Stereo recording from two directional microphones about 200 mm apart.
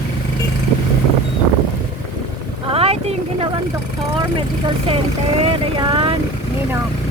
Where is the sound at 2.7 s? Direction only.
30° right (ahead or behind).